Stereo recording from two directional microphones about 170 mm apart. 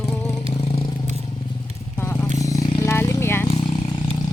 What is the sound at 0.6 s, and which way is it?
Vehicle, 35° left (ahead or behind).